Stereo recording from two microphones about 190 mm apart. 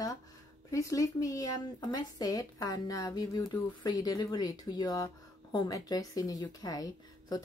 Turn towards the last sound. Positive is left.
turn(degrees=20)  # may be behind; listen again after turning